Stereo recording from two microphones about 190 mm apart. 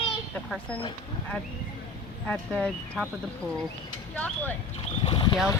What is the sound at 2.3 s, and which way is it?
Speech, 5° left (ahead or behind).